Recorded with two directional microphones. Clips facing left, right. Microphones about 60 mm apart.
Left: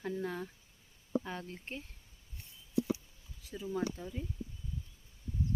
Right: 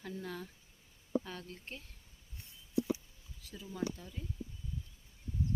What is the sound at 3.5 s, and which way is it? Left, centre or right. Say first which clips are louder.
Speech: left 4 dB; left.